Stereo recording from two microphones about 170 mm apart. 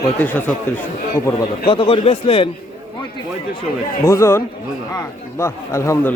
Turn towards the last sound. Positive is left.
turn(degrees=15)  # may be behind; listen again after turning